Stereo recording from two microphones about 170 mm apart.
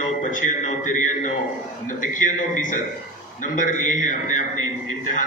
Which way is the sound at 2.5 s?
50° left (ahead or behind).